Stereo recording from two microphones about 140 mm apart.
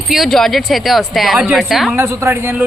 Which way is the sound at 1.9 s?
15° right (ahead or behind).